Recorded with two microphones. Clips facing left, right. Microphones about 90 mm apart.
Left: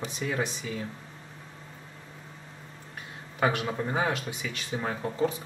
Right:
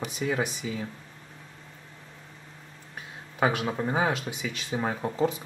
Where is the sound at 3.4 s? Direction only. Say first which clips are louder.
Right 1 dB; 15° right (ahead or behind).